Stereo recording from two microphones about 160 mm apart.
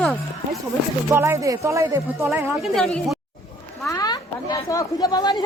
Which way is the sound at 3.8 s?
20° left (ahead or behind).